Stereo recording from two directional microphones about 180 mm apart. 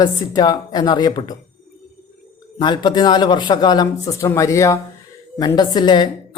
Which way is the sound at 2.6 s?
25° left (ahead or behind).